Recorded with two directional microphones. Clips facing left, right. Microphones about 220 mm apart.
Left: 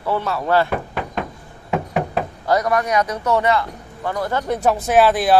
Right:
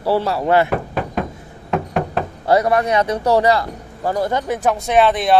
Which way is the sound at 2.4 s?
30° right (ahead or behind).